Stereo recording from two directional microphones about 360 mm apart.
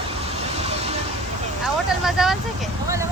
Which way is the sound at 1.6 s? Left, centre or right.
Centre.